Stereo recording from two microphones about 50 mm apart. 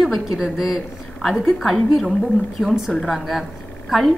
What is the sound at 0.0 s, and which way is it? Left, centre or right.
A woman's voice, centre.